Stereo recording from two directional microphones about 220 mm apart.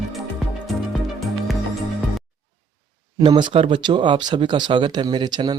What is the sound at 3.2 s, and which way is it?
Speech, 20° right (ahead or behind).